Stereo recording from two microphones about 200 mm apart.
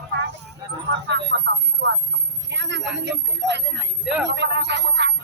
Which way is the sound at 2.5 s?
65° right (ahead or behind).